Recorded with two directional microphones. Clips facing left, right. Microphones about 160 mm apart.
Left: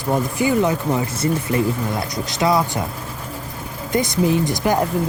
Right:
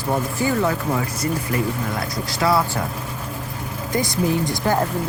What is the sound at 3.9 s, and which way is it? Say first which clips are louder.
Speech: left 3 dB; 20° left (ahead or behind).